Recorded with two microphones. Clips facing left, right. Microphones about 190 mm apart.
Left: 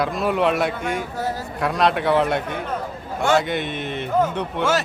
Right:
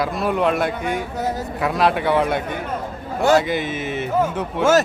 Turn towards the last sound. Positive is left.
turn(degrees=0)  # may be behind; listen again after turning